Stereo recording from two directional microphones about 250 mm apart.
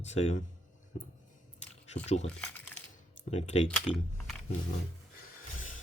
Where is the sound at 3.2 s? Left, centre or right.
Left.